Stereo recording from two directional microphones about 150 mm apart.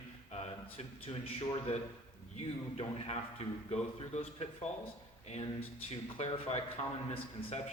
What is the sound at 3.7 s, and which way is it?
Speech, 40° left (ahead or behind).